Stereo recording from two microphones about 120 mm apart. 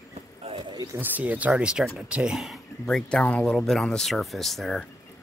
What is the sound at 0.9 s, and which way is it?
Speech, 15° right (ahead or behind).